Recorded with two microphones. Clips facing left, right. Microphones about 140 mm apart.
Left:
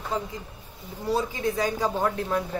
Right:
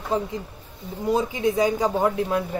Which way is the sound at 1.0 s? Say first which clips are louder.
Right 4 dB; 20° right (ahead or behind).